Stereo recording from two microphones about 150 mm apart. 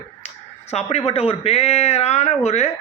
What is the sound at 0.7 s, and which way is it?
A man's voice, 45° left (ahead or behind).